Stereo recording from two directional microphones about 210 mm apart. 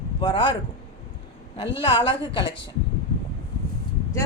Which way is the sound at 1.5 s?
20° left (ahead or behind).